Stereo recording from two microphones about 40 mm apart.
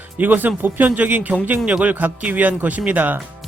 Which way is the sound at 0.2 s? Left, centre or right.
Right.